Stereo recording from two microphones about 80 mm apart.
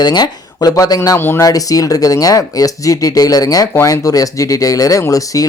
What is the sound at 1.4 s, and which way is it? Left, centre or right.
Speech, left.